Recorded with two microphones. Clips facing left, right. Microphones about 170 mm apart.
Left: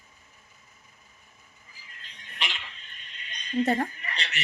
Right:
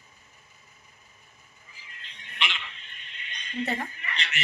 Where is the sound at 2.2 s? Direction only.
40° left (ahead or behind).